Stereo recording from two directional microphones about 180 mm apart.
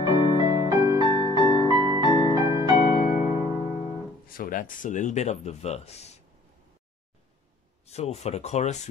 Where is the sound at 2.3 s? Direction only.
20° right (ahead or behind).